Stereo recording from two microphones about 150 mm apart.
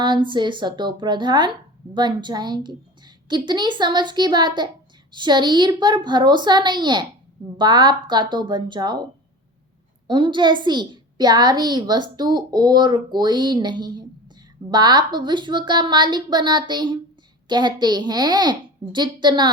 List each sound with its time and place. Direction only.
0.0 s a child's voice: 30° right (ahead or behind)
10.1 s a child's voice: 30° right (ahead or behind)